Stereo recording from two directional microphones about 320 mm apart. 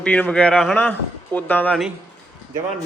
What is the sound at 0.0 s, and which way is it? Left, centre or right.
A man's voice, centre.